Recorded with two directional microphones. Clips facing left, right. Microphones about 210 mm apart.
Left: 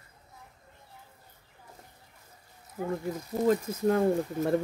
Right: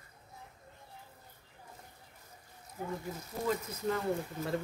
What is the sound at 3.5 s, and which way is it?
Speech, 50° left (ahead or behind).